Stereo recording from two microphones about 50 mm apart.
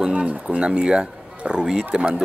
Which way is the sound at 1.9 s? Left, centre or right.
Right.